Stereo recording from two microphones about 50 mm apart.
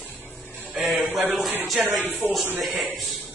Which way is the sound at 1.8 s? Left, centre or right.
Right.